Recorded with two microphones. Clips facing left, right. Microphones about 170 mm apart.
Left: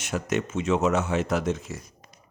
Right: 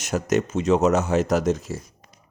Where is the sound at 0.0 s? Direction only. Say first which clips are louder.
Right 5 dB; 40° right (ahead or behind).